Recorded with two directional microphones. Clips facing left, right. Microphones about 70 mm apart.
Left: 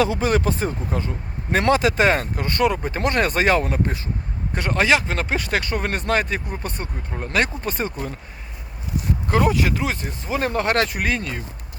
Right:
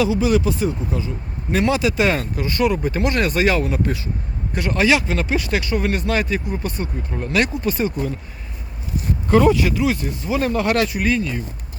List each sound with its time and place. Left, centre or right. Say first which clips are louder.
0.0 s speech: right 2 dB; left
9.3 s speech: right 5 dB; centre
9.6 s speech: right 4 dB; left